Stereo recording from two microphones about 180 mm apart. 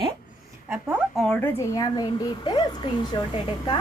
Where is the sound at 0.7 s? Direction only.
10° right (ahead or behind).